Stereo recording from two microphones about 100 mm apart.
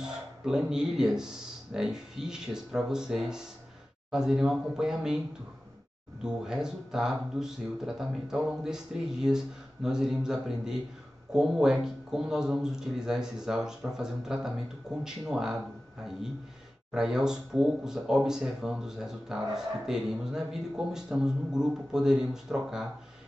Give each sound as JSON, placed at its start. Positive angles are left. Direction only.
{"t": 0.0, "sound": "speech", "side_deg": -5}
{"t": 6.2, "sound": "speech", "side_deg": -5}
{"t": 16.9, "sound": "speech", "side_deg": -5}